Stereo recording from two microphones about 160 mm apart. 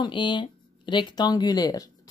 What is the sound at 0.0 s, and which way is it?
Speech, 30° left (ahead or behind).